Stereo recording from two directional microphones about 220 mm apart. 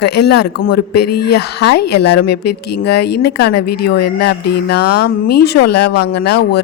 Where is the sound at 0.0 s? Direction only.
50° left (ahead or behind).